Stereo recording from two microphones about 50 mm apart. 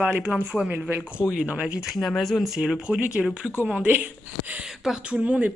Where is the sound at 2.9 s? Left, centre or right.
Centre.